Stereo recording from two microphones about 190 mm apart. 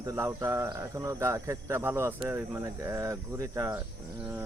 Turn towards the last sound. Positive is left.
turn(degrees=-15)  # may be behind; listen again after turning